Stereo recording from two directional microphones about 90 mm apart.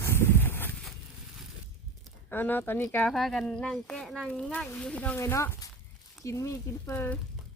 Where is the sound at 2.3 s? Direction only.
20° left (ahead or behind).